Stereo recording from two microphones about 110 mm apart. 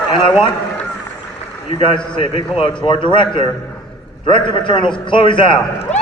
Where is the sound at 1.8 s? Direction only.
50° left (ahead or behind).